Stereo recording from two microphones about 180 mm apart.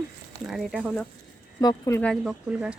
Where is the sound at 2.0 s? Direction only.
5° left (ahead or behind).